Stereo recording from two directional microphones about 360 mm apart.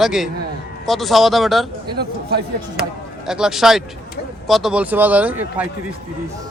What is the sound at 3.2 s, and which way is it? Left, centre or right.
A man's voice, centre.